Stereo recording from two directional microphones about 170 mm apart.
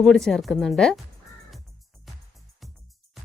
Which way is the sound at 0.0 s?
Centre (ahead or behind).